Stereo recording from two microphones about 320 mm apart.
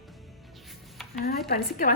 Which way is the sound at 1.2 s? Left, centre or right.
Left.